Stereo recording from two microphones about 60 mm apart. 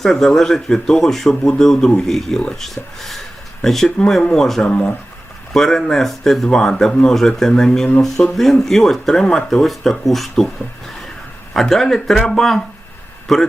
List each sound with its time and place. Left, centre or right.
0.0 s speech: centre
2.4 s speech: centre
2.6 s speech: centre
3.8 s speech: centre
4.6 s speech: centre
5.5 s speech: centre